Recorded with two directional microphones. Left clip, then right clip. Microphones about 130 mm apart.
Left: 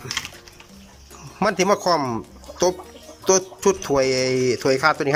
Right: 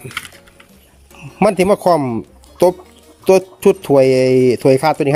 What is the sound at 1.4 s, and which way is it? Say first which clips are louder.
Speech: right 6 dB; 35° right (ahead or behind).